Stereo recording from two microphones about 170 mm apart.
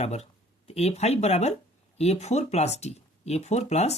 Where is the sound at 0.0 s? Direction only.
40° left (ahead or behind).